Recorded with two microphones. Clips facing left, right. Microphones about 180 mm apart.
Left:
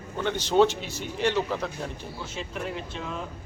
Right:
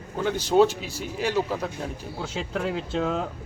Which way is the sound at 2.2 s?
90° right.